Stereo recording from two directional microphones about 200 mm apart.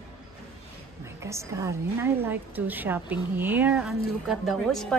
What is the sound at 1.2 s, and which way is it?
A woman's voice, 15° right (ahead or behind).